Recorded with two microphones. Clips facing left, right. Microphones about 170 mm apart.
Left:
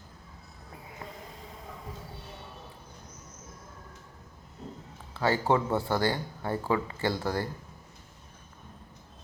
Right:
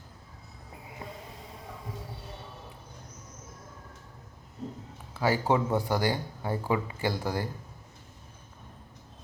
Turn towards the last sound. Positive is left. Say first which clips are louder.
# left 1 dB
turn(degrees=-15)  # may be behind; listen again after turning